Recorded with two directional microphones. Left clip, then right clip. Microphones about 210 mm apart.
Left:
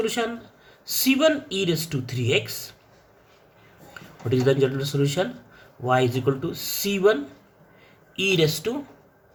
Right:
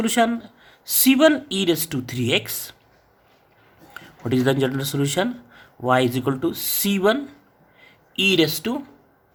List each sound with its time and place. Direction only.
0.0 s speech: 45° right (ahead or behind)
3.9 s speech: 40° right (ahead or behind)
7.8 s a sound: 40° right (ahead or behind)